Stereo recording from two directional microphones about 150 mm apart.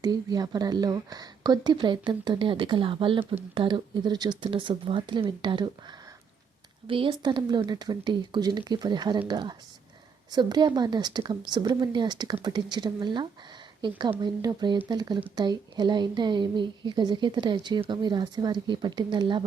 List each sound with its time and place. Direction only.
0.0 s a woman's voice: 25° right (ahead or behind)
6.8 s a woman's voice: 35° right (ahead or behind)